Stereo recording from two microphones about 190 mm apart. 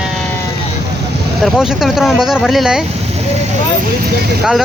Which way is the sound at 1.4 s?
Centre (ahead or behind).